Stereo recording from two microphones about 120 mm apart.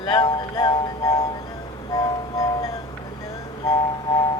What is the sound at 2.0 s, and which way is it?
Music, 30° left (ahead or behind).